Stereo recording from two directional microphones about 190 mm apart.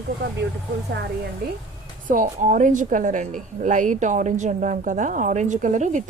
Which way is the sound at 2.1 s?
45° right (ahead or behind).